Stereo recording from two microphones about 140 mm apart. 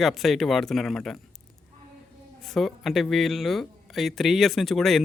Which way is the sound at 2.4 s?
Centre (ahead or behind).